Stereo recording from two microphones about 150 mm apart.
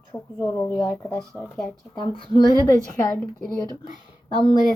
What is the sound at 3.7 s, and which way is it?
Speech, 30° right (ahead or behind).